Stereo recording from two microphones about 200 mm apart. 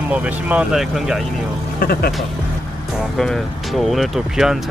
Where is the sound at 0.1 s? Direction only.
5° right (ahead or behind).